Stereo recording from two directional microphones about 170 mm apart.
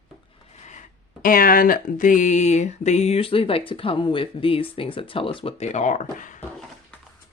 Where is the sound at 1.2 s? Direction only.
55° left (ahead or behind).